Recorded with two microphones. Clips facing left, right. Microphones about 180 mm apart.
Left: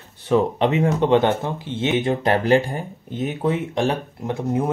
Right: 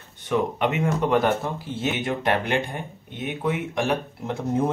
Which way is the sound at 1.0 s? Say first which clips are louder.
Left 3 dB; 25° left (ahead or behind).